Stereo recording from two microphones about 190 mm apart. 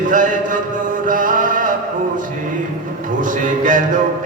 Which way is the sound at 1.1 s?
45° right (ahead or behind).